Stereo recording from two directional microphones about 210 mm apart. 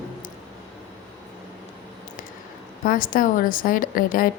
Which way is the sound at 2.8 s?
40° left (ahead or behind).